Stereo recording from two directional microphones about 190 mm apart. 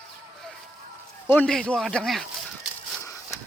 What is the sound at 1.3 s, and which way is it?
Speech, 5° left (ahead or behind).